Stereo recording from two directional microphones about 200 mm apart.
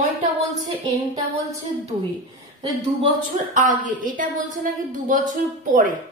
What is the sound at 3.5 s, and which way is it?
A woman's voice, 40° right (ahead or behind).